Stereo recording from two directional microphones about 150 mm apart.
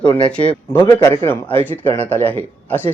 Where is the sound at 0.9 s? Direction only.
25° left (ahead or behind).